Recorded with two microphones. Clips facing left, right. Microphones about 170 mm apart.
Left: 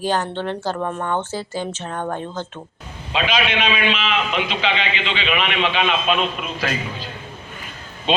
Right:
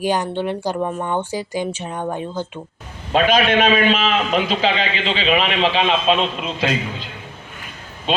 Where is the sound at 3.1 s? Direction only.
45° right (ahead or behind); by 7.0 s 20° right (ahead or behind).